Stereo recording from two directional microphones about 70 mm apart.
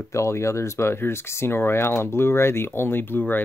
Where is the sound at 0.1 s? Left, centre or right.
Left.